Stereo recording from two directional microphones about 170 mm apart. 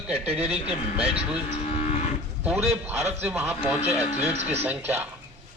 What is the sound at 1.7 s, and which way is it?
Moo, 40° left (ahead or behind).